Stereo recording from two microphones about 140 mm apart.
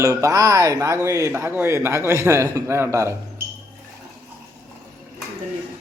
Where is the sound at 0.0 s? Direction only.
25° right (ahead or behind).